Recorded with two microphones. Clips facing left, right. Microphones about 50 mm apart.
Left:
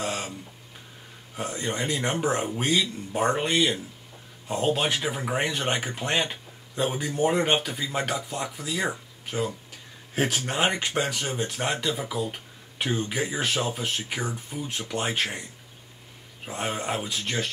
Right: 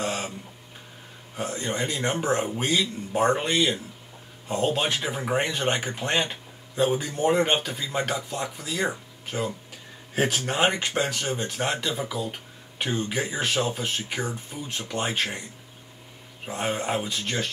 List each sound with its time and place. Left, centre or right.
0.0 s a sound: centre
1.3 s speech: centre
16.4 s speech: centre